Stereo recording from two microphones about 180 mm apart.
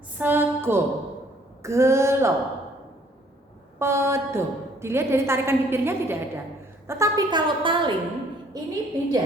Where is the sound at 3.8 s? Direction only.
15° right (ahead or behind).